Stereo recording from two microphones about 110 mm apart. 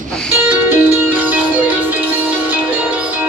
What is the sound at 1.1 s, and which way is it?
Music, 15° right (ahead or behind).